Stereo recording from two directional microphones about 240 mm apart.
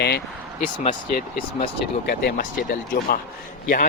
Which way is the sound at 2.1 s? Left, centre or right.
Left.